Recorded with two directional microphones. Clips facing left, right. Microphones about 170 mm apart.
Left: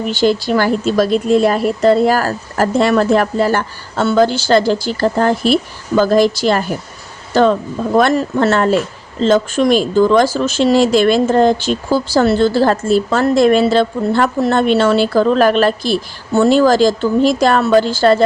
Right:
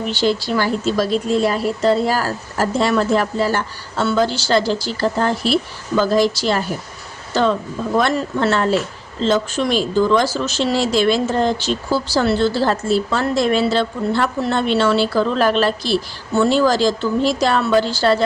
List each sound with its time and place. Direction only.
0.1 s speech: 50° left (ahead or behind)